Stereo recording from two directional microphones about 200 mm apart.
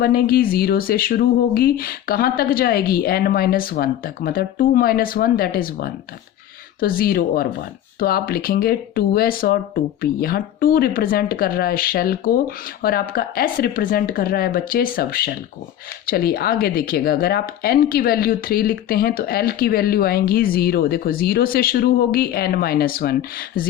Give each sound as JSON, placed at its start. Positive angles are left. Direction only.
{"t": 0.0, "sound": "speech", "side_deg": 45}